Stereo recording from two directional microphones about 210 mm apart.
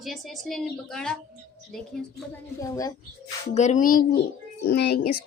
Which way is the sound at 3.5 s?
35° left (ahead or behind).